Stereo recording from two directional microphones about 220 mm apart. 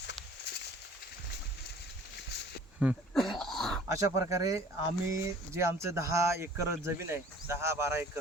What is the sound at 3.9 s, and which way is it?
Speech, 15° right (ahead or behind).